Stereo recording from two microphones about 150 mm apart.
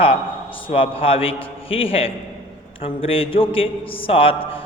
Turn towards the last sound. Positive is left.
turn(degrees=40)  # may be behind; listen again after turning